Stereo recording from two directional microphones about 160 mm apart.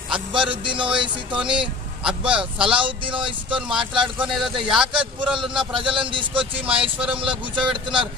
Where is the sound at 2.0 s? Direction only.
5° right (ahead or behind).